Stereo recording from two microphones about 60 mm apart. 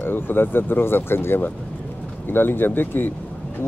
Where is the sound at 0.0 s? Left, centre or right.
Left.